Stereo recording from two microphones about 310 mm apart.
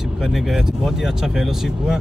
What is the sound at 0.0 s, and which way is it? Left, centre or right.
Speech, centre.